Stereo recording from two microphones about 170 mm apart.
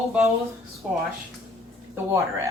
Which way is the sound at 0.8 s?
5° right (ahead or behind).